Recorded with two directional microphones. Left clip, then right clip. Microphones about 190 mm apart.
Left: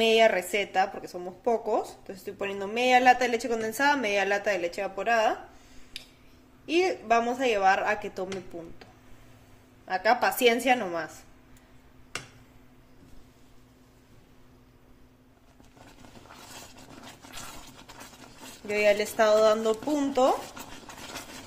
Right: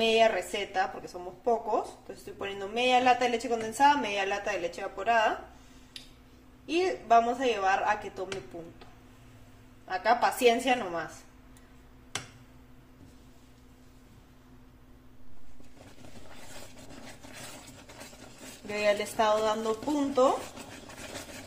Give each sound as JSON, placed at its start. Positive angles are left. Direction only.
{"t": 0.0, "sound": "a woman's voice", "side_deg": 45}
{"t": 6.6, "sound": "a woman's voice", "side_deg": 55}
{"t": 9.8, "sound": "a woman's voice", "side_deg": 50}
{"t": 18.7, "sound": "speech", "side_deg": 30}